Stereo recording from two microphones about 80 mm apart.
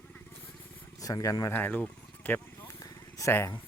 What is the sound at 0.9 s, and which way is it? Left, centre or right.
Speech, left.